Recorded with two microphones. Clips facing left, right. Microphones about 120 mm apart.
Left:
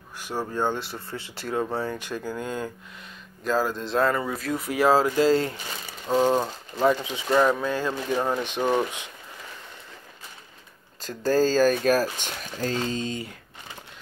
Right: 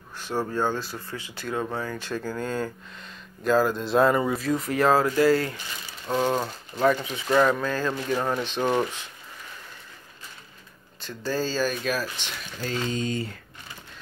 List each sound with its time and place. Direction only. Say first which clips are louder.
0.2 s speech: right 1 dB; 10° left (ahead or behind); by 2.0 s 30° left (ahead or behind)
2.0 s speech: right 1 dB; 15° left (ahead or behind)
3.4 s speech: right 3 dB; centre (ahead or behind)
4.3 s speech: right 3 dB; centre (ahead or behind); by 7.2 s 20° left (ahead or behind)
7.2 s speech: even; 10° left (ahead or behind)
11.1 s speech: left 6 dB; 45° left (ahead or behind)